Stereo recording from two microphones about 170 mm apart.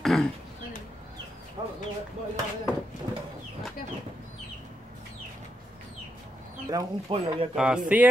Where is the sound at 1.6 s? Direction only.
30° right (ahead or behind).